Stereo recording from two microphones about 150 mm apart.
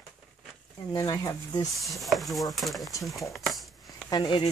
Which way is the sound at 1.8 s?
Centre (ahead or behind).